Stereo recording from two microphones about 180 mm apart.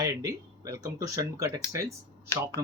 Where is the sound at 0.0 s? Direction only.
20° right (ahead or behind).